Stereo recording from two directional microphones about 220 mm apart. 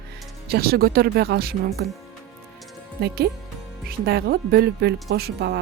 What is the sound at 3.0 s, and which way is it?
A woman's voice, 45° right (ahead or behind).